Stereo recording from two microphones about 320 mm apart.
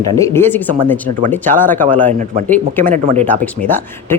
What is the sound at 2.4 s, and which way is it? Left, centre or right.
Speech, centre.